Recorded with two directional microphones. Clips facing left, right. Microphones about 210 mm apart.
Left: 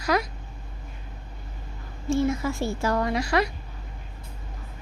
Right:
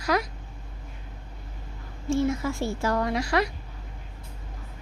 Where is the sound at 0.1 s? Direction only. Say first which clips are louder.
Left 1 dB; 20° left (ahead or behind).